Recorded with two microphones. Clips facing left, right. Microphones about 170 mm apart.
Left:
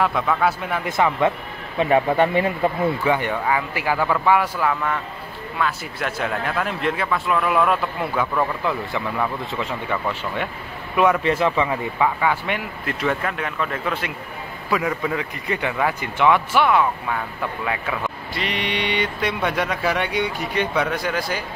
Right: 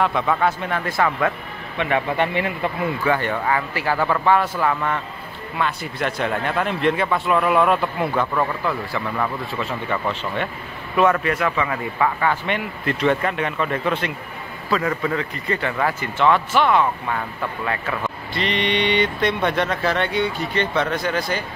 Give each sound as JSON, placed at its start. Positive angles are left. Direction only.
{"t": 0.0, "sound": "a man's voice", "side_deg": 0}
{"t": 0.8, "sound": "speech", "side_deg": 20}
{"t": 1.8, "sound": "speech", "side_deg": 35}
{"t": 3.0, "sound": "a man's voice", "side_deg": 15}
{"t": 9.5, "sound": "speech", "side_deg": 15}
{"t": 11.2, "sound": "speech", "side_deg": 25}
{"t": 12.0, "sound": "a man's voice", "side_deg": 10}